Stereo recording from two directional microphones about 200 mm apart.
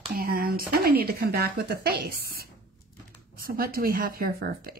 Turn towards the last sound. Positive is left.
turn(degrees=-50)  # may be behind; listen again after turning